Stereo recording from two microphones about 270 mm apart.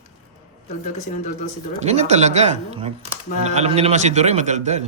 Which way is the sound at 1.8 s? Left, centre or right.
Right.